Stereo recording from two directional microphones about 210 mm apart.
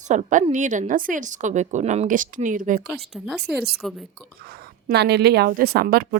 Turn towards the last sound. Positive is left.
turn(degrees=-45)  # may be behind; listen again after turning